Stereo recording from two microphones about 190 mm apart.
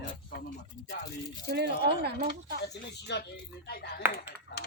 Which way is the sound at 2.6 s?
65° left (ahead or behind).